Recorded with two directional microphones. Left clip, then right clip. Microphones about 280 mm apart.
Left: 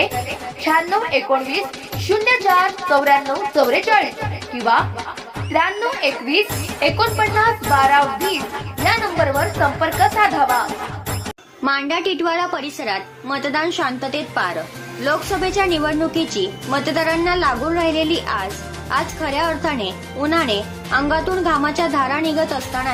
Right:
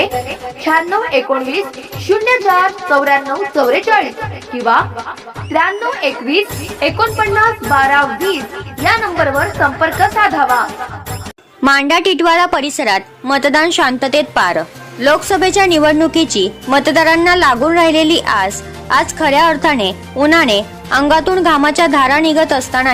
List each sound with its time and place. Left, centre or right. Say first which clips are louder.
0.1 s jingle bell: right 5 dB; centre
0.7 s speech: right 4 dB; centre
9.6 s speech: right 4 dB; centre
11.6 s speech: right 9 dB; right